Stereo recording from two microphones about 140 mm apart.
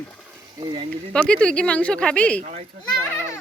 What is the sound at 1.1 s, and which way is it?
Speech, 5° left (ahead or behind).